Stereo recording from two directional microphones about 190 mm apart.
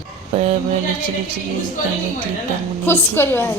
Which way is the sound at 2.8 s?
10° left (ahead or behind).